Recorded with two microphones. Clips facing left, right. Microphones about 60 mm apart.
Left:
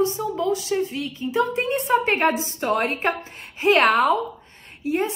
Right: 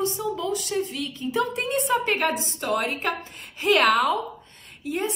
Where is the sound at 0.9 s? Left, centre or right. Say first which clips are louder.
Left 3 dB; centre.